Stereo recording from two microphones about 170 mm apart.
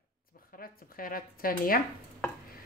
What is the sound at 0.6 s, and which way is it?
Speech, 55° left (ahead or behind).